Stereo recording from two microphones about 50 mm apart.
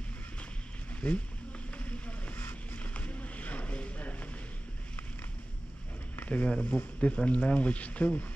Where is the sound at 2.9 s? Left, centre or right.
Left.